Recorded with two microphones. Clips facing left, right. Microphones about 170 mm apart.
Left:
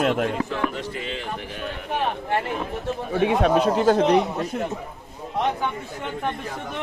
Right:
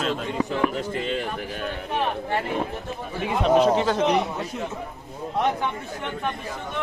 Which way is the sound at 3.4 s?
45° left (ahead or behind).